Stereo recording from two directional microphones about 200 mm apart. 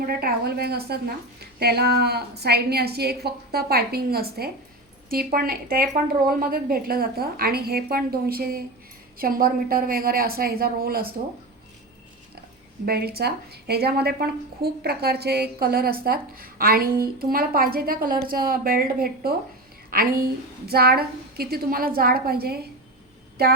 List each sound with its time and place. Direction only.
0.0 s a woman's voice: 50° right (ahead or behind)
12.8 s a woman's voice: 50° right (ahead or behind)